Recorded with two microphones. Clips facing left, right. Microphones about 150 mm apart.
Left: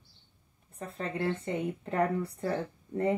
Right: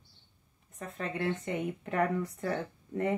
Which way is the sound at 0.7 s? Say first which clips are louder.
Left 1 dB; 30° left (ahead or behind).